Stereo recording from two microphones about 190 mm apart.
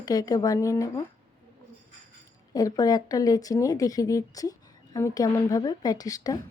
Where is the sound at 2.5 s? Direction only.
20° left (ahead or behind).